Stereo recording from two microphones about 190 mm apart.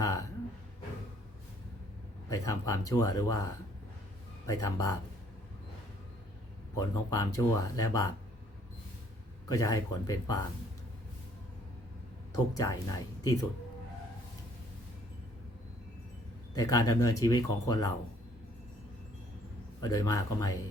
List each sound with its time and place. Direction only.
0.0 s a sound: 20° left (ahead or behind)
2.3 s speech: 20° left (ahead or behind)
4.4 s speech: 15° left (ahead or behind)
6.7 s speech: 20° left (ahead or behind)
9.5 s speech: 20° left (ahead or behind)
12.3 s speech: 20° left (ahead or behind)
16.6 s speech: 20° left (ahead or behind)
19.8 s speech: 20° left (ahead or behind)